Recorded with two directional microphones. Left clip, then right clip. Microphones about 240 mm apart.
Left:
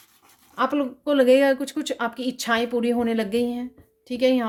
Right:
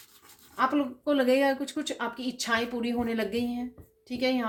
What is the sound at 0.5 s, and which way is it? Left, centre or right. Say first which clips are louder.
Speech: left 3 dB; left.